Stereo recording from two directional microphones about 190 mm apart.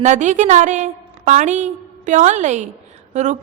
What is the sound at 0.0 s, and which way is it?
A woman's voice, 40° right (ahead or behind).